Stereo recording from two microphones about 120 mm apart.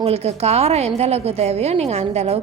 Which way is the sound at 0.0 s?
60° right (ahead or behind).